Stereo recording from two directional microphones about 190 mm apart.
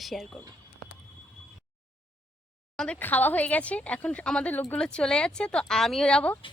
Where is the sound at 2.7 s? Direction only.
5° left (ahead or behind).